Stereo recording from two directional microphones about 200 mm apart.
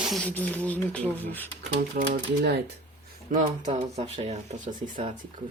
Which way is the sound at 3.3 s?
40° right (ahead or behind).